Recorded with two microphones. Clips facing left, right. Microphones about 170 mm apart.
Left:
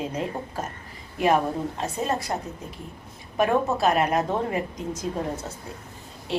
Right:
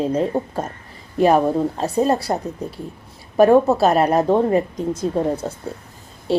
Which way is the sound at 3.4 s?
35° right (ahead or behind).